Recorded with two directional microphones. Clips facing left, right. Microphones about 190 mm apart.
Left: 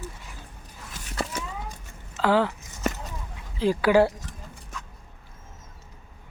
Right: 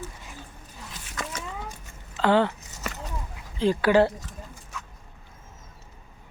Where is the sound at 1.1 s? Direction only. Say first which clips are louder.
Left 4 dB; 35° left (ahead or behind).